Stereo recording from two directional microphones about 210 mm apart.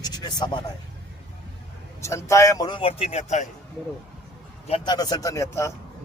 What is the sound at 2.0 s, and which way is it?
Speech, 15° left (ahead or behind).